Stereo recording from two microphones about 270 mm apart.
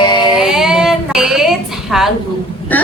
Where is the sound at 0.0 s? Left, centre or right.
Centre.